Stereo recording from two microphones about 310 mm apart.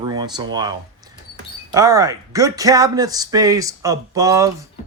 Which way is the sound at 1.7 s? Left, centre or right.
Centre.